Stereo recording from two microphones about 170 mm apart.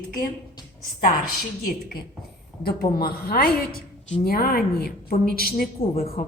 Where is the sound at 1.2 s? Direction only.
60° left (ahead or behind).